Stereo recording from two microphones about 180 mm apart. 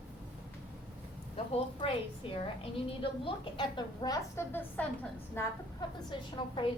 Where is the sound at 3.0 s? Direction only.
30° left (ahead or behind); by 5.5 s 15° left (ahead or behind).